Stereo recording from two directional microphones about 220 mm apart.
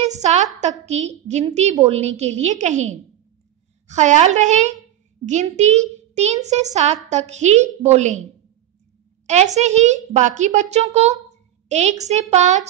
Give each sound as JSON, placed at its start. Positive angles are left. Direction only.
{"t": 0.1, "sound": "a child's voice", "side_deg": -30}
{"t": 9.2, "sound": "a child's voice", "side_deg": -30}